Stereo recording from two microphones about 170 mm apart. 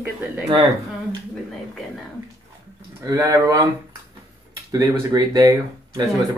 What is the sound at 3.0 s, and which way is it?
Speech, 20° right (ahead or behind).